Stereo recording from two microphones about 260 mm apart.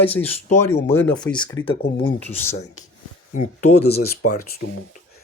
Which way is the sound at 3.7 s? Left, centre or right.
Left.